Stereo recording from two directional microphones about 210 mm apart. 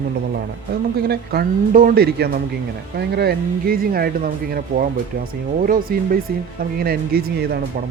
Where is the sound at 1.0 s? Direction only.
45° right (ahead or behind).